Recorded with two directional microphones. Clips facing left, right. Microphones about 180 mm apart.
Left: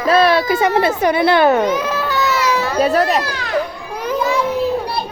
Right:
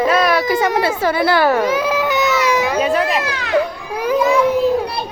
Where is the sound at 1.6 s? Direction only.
5° right (ahead or behind).